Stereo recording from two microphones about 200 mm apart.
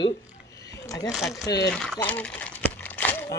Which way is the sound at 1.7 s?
5° left (ahead or behind).